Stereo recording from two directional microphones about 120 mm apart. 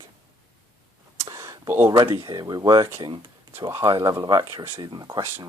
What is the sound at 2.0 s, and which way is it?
Speech, 30° right (ahead or behind).